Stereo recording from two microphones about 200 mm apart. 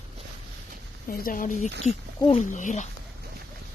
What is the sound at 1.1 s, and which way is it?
Speech, 45° left (ahead or behind).